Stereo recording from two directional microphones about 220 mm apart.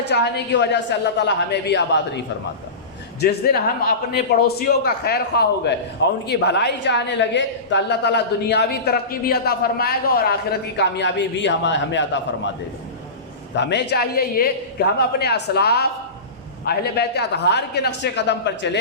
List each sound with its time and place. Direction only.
0.1 s a woman's voice: 50° left (ahead or behind)
3.2 s a woman's voice: 45° left (ahead or behind)
13.6 s a woman's voice: 50° left (ahead or behind)